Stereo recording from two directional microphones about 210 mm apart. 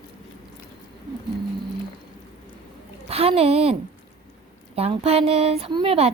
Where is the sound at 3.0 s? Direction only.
30° right (ahead or behind).